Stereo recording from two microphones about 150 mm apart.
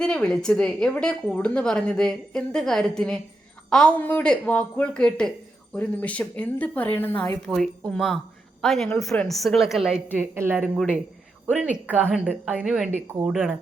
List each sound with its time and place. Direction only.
0.0 s a woman's voice: 5° left (ahead or behind); by 10.7 s 15° right (ahead or behind)
11.9 s a woman's voice: 10° right (ahead or behind)